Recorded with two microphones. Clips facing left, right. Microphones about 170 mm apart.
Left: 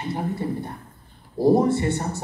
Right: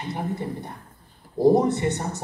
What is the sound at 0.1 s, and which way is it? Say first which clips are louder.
Speech: left 2 dB; 20° right (ahead or behind).